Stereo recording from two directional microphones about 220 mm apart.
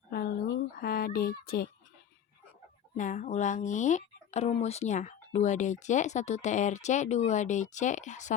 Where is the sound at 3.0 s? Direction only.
35° left (ahead or behind).